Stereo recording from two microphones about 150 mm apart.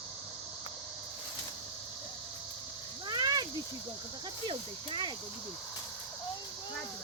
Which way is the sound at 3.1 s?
25° right (ahead or behind).